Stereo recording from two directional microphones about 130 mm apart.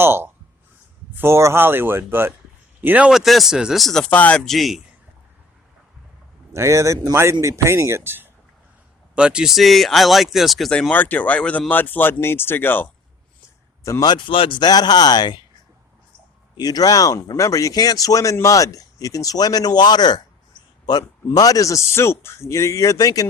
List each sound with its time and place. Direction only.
0.0 s speech: 20° right (ahead or behind); by 4.8 s centre (ahead or behind)
6.5 s speech: 25° right (ahead or behind)
9.1 s speech: 5° right (ahead or behind); by 12.9 s 15° left (ahead or behind)
14.0 s speech: 35° left (ahead or behind)
16.6 s speech: 30° left (ahead or behind)